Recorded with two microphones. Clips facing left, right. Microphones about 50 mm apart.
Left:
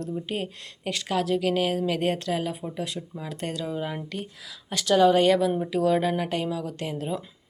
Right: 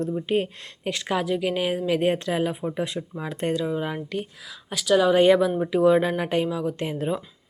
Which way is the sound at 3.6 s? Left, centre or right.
Centre.